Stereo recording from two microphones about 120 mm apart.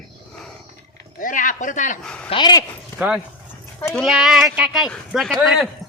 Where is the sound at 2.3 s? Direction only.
40° left (ahead or behind).